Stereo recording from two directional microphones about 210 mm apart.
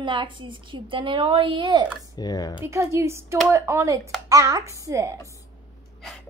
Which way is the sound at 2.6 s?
15° right (ahead or behind).